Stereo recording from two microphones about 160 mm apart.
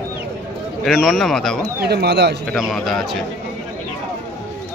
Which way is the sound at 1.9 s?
90° right.